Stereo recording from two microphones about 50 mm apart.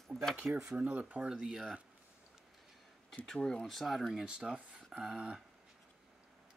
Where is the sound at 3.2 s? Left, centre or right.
Centre.